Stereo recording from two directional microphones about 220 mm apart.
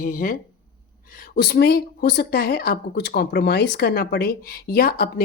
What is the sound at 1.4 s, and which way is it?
Speech, 45° left (ahead or behind).